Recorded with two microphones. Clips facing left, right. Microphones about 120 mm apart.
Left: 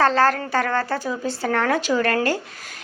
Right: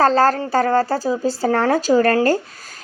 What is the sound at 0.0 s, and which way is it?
Speech, 35° right (ahead or behind).